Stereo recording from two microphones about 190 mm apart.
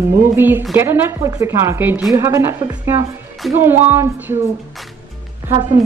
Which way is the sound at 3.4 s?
Centre (ahead or behind).